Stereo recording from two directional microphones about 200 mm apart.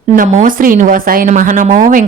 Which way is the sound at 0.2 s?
40° right (ahead or behind).